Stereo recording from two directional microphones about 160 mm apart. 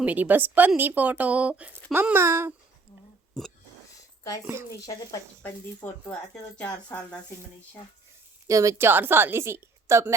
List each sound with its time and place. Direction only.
0.0 s speech: 10° right (ahead or behind)
3.3 s a sound: centre (ahead or behind)
4.7 s speech: 20° left (ahead or behind)
5.4 s speech: 10° left (ahead or behind)
8.4 s speech: 20° right (ahead or behind)